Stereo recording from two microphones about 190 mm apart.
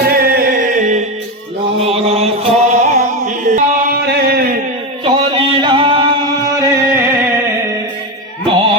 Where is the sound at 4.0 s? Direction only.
55° right (ahead or behind).